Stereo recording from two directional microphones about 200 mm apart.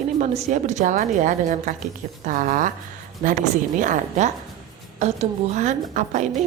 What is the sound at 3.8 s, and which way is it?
Speech, 40° right (ahead or behind).